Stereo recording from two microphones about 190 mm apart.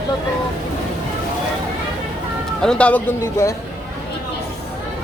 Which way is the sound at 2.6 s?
5° left (ahead or behind).